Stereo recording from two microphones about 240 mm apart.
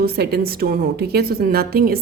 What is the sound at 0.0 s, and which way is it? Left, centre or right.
Speech, right.